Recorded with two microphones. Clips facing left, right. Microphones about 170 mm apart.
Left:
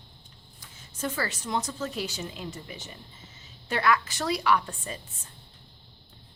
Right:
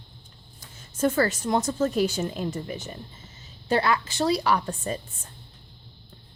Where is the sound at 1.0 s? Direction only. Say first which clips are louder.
Right 9 dB; 45° right (ahead or behind).